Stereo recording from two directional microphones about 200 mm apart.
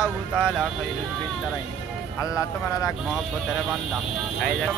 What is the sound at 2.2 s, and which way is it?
Speech, 15° left (ahead or behind).